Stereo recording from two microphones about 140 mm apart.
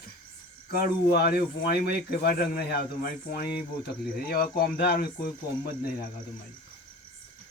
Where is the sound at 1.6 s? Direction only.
90° left.